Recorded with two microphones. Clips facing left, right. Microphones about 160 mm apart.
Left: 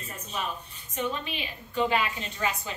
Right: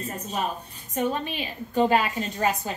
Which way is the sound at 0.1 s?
40° right (ahead or behind).